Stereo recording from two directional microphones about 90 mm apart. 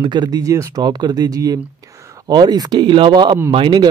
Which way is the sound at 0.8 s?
50° right (ahead or behind).